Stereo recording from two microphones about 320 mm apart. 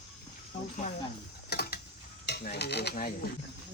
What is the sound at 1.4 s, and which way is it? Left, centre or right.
Mechanisms, left.